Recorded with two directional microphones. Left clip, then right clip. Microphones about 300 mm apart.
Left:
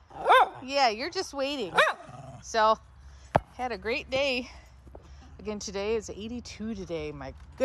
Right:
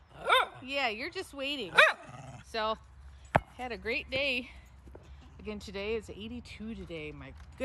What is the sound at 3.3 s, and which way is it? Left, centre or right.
Speech, centre.